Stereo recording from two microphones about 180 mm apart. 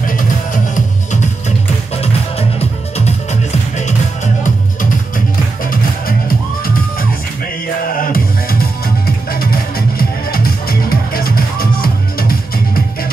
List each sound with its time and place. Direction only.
4.4 s music: 50° left (ahead or behind)